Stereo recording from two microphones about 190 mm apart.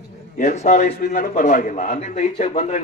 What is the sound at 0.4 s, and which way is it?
A man's voice, 40° left (ahead or behind).